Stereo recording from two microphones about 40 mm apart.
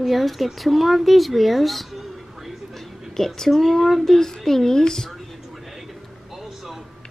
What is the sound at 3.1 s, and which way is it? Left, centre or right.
A woman's voice, centre.